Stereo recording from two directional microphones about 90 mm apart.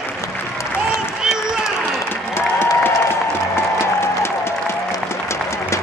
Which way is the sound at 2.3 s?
25° left (ahead or behind).